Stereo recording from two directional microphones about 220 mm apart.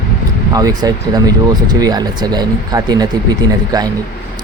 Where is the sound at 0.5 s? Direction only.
15° right (ahead or behind).